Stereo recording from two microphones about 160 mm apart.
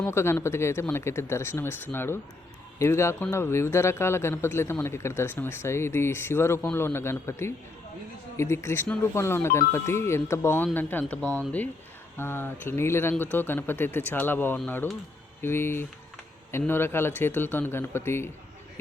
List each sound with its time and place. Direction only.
0.0 s speech: 15° left (ahead or behind)